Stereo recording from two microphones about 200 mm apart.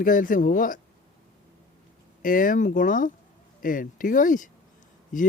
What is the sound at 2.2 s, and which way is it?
A man's voice, 40° left (ahead or behind).